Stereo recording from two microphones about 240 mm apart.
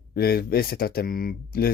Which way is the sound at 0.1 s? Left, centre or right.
Left.